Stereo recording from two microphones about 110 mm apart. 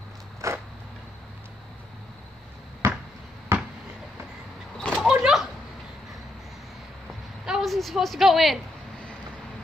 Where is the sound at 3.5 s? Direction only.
25° right (ahead or behind).